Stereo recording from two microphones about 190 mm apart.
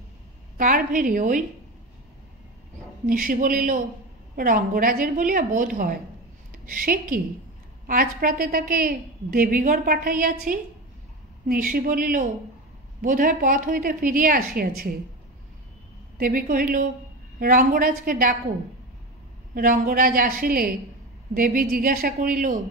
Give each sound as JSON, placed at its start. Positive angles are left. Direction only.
{"t": 0.6, "sound": "a woman's voice", "side_deg": -45}
{"t": 3.1, "sound": "a woman's voice", "side_deg": -45}
{"t": 16.2, "sound": "a woman's voice", "side_deg": -50}
{"t": 19.5, "sound": "a woman's voice", "side_deg": -45}